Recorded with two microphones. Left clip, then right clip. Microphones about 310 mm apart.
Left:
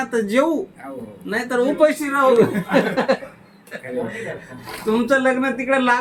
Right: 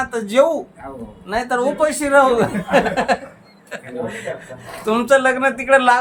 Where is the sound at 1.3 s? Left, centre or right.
Right.